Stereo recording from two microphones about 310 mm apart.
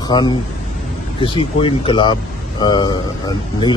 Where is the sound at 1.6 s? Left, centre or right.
Centre.